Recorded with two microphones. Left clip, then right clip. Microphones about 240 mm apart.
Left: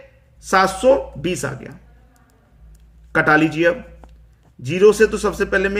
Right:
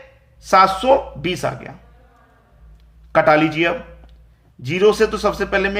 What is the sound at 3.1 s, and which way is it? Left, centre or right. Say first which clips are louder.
A man's voice: right 1 dB; centre.